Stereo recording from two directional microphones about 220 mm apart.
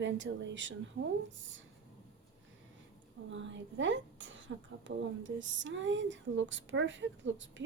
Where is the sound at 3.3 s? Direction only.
55° right (ahead or behind).